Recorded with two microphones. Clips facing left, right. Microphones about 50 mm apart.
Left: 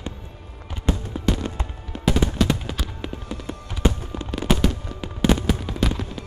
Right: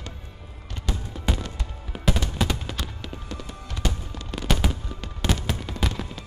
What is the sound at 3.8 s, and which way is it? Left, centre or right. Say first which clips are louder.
Music: left 7 dB; left.